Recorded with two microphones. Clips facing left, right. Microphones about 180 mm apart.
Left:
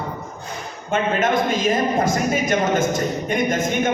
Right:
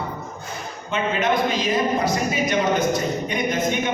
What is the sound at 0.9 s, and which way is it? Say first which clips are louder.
A man's voice: left 2 dB; 50° left (ahead or behind).